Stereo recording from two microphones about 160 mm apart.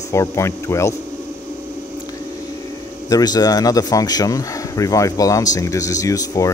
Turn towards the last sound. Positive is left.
turn(degrees=20)  # may be behind; listen again after turning